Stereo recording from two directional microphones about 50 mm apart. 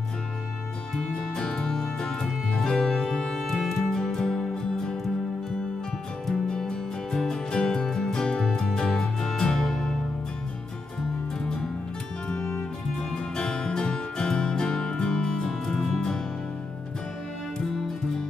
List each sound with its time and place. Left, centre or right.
1.1 s music: centre
6.2 s music: centre
11.4 s music: centre
13.1 s music: centre